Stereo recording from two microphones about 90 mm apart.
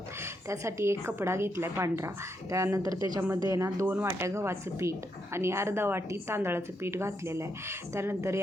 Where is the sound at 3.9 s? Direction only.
25° right (ahead or behind).